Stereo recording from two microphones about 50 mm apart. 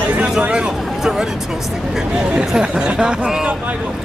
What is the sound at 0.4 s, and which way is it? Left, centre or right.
Speech, right.